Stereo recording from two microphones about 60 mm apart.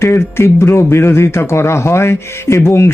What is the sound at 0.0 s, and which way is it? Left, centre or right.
Speech, left.